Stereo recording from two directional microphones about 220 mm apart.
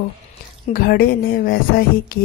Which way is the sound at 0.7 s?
40° left (ahead or behind).